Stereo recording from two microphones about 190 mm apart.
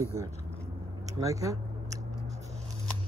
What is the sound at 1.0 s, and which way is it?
Biting, 15° right (ahead or behind).